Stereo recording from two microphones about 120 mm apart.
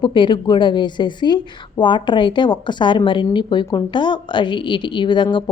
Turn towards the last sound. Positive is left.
turn(degrees=40)  # may be behind; listen again after turning